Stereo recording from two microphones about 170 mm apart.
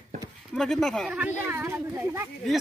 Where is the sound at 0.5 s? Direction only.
5° left (ahead or behind); by 2.2 s 15° right (ahead or behind).